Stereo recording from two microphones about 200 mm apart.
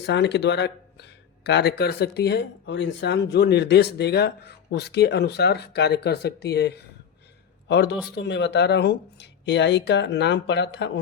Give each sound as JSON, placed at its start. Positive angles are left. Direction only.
{"t": 0.0, "sound": "speech", "side_deg": 60}